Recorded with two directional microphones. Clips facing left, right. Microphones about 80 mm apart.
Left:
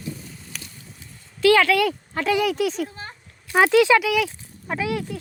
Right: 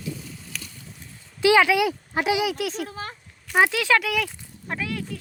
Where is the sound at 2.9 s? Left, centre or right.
Right.